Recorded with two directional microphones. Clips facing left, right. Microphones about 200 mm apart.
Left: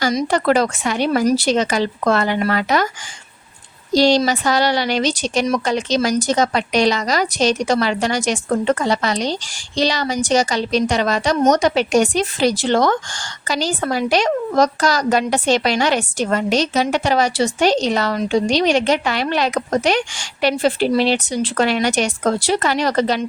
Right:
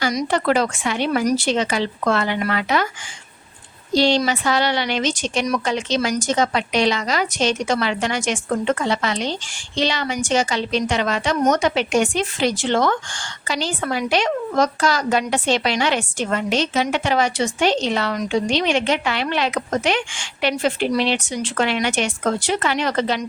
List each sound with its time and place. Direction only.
0.3 s a woman's voice: 40° left (ahead or behind)
3.9 s a woman's voice: 40° left (ahead or behind)